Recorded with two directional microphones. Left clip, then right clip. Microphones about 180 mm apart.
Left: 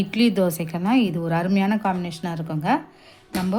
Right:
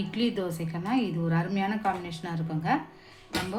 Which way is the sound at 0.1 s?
60° left (ahead or behind).